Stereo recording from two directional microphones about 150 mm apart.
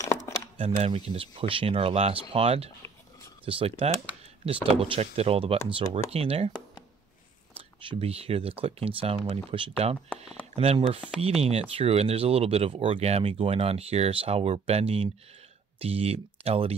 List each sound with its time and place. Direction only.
0.6 s speech: 40° right (ahead or behind)
7.5 s speech: 40° right (ahead or behind)